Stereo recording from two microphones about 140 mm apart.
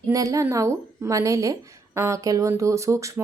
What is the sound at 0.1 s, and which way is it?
Speech, 25° right (ahead or behind).